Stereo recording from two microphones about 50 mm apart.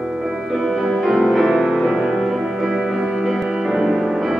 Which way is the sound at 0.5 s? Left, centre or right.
Centre.